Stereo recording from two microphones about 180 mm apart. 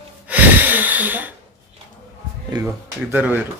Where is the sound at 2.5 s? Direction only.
15° right (ahead or behind).